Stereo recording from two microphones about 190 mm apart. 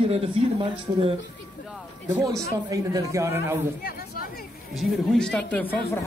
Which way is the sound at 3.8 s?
50° left (ahead or behind).